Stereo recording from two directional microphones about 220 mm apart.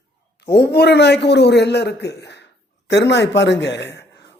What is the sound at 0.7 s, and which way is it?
A man's voice, 50° left (ahead or behind).